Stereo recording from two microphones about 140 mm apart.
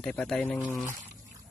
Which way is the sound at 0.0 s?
5° left (ahead or behind).